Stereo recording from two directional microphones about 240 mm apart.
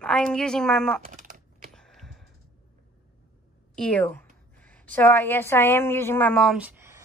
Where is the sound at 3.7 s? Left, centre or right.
Centre.